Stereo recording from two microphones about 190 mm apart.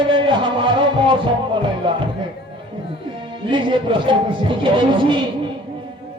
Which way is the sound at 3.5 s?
25° right (ahead or behind).